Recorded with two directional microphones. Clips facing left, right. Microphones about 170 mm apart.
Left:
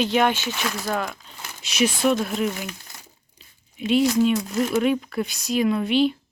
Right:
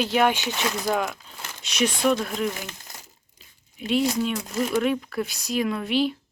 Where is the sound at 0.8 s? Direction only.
5° right (ahead or behind).